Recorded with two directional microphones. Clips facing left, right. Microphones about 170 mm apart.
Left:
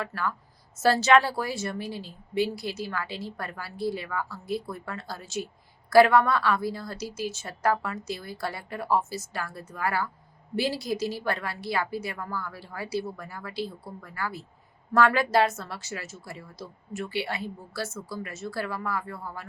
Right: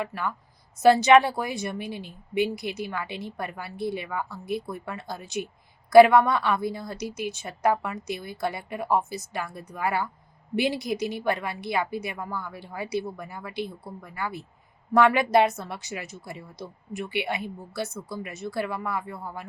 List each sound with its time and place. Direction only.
0.0 s a woman's voice: 20° right (ahead or behind)